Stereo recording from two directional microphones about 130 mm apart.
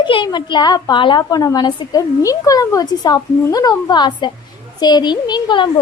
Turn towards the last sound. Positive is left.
turn(degrees=35)  # may be behind; listen again after turning